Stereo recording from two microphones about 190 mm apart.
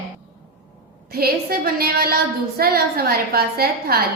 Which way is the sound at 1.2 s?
55° right (ahead or behind).